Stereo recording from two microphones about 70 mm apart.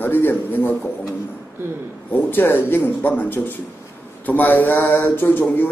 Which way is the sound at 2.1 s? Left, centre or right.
Left.